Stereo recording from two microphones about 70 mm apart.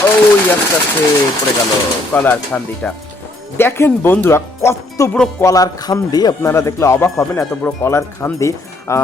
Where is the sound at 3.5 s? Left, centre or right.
Left.